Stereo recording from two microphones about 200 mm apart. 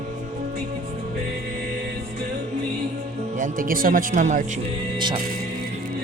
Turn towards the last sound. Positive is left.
turn(degrees=-25)  # may be behind; listen again after turning